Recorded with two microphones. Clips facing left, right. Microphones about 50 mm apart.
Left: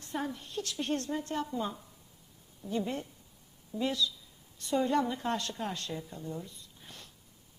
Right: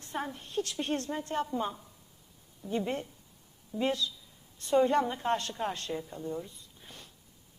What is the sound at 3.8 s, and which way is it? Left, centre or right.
A woman's voice, right.